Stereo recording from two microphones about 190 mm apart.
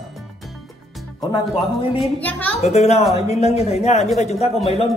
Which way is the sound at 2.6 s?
35° left (ahead or behind).